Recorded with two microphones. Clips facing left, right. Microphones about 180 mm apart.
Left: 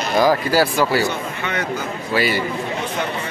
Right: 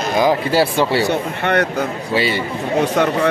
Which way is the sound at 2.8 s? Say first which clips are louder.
Right 8 dB; 80° right.